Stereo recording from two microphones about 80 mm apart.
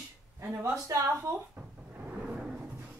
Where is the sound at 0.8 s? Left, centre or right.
Right.